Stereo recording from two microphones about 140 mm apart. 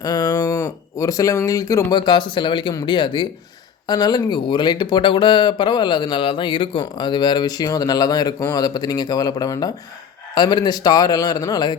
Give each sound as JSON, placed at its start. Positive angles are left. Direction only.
{"t": 0.0, "sound": "a man's voice", "side_deg": 25}